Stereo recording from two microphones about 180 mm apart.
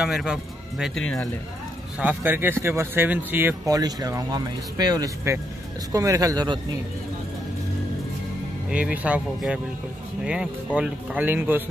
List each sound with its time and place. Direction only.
0.0 s speech: 5° right (ahead or behind)
2.0 s speech: 10° right (ahead or behind)
8.6 s speech: 5° right (ahead or behind)